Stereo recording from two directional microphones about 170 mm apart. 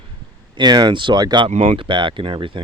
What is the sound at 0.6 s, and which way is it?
Speech, 25° right (ahead or behind).